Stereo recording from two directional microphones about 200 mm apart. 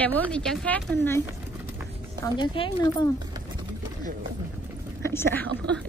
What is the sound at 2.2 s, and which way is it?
Speech, 25° left (ahead or behind).